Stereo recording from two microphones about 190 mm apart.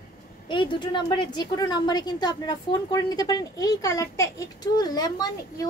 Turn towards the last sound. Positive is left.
turn(degrees=20)  # may be behind; listen again after turning